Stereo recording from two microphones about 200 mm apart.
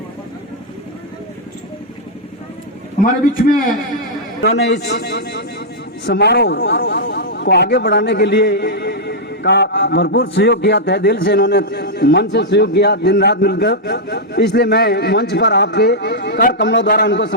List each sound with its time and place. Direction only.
3.3 s a man's voice: 45° left (ahead or behind)
4.4 s a man's voice: 60° left (ahead or behind)